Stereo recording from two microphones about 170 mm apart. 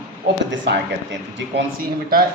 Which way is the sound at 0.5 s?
90° right.